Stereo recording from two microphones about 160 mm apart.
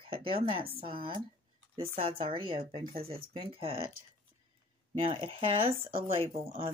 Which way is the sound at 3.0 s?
70° right (ahead or behind).